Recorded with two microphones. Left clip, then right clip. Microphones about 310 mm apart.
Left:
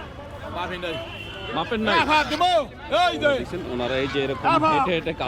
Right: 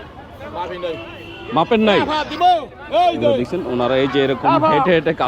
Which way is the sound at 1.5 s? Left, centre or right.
Right.